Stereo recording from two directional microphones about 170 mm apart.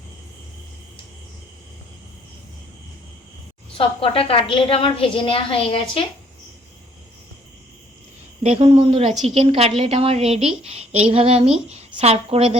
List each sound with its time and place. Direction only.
3.8 s a woman's voice: 35° left (ahead or behind)
8.4 s a woman's voice: 35° right (ahead or behind)